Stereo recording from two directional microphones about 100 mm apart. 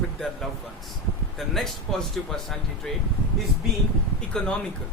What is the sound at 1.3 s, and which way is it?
Speech, 5° left (ahead or behind).